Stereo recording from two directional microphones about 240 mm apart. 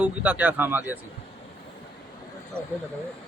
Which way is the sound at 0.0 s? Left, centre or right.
Centre.